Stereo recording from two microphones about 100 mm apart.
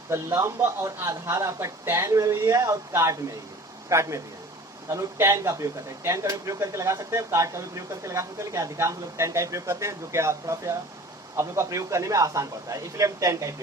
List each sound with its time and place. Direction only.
0.1 s a man's voice: 25° right (ahead or behind)